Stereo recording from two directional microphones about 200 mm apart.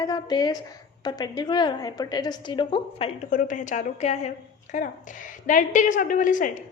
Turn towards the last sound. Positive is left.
turn(degrees=40)  # may be behind; listen again after turning